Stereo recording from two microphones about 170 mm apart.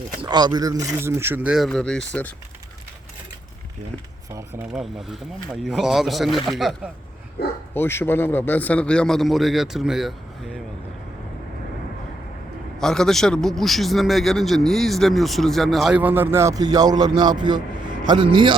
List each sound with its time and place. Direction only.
0.2 s speech: 25° right (ahead or behind)
1.5 s a man's voice: centre (ahead or behind)
4.3 s a man's voice: 15° right (ahead or behind)
7.7 s a man's voice: 15° left (ahead or behind)
12.8 s a man's voice: 5° left (ahead or behind); by 18.5 s 30° right (ahead or behind)